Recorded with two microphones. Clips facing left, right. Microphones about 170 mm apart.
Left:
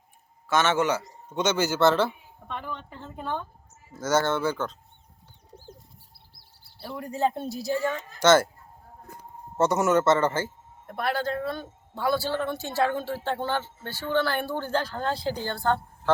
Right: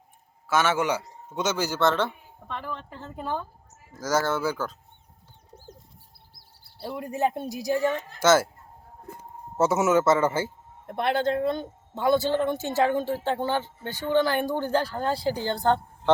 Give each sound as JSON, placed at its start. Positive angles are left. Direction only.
{"t": 0.4, "sound": "a man's voice", "side_deg": -10}
{"t": 1.4, "sound": "speech", "side_deg": 0}
{"t": 6.8, "sound": "speech", "side_deg": -20}
{"t": 8.2, "sound": "speech", "side_deg": -5}
{"t": 9.6, "sound": "speech", "side_deg": -5}
{"t": 10.8, "sound": "speech", "side_deg": -25}